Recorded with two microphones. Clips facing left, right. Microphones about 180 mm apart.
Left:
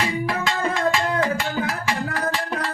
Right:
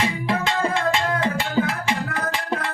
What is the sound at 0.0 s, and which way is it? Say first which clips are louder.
Music: right 1 dB; 25° right (ahead or behind).